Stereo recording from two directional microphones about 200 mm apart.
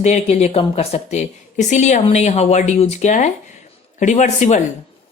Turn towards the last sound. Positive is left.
turn(degrees=35)  # may be behind; listen again after turning